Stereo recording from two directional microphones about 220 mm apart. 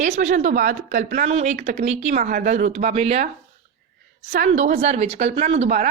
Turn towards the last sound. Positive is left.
turn(degrees=-30)  # may be behind; listen again after turning